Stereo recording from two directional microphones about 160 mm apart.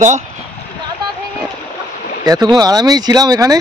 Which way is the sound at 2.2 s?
25° right (ahead or behind).